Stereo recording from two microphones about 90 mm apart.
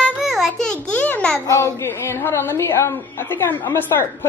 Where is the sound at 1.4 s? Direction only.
30° left (ahead or behind).